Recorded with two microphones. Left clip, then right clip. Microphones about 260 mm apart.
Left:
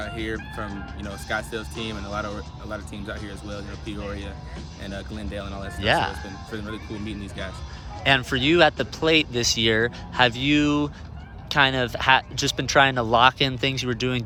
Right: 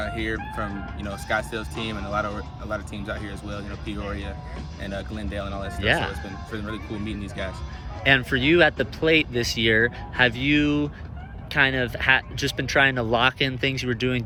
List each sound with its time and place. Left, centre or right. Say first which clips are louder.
0.0 s speech: right 2 dB; centre